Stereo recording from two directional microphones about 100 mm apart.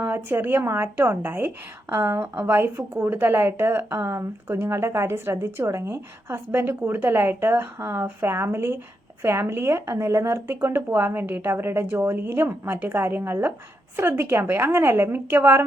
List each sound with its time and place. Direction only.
0.0 s a woman's voice: 20° right (ahead or behind)